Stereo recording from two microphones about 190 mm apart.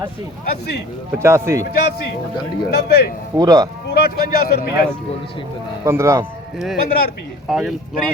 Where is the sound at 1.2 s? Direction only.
15° right (ahead or behind).